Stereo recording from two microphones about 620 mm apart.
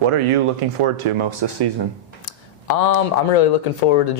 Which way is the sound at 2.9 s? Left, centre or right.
Left.